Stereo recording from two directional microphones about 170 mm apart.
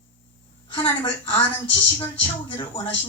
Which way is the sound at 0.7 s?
30° left (ahead or behind).